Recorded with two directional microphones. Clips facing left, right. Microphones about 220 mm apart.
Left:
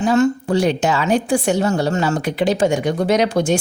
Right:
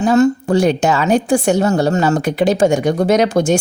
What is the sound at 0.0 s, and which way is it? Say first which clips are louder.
A woman's voice: right 3 dB; 40° right (ahead or behind).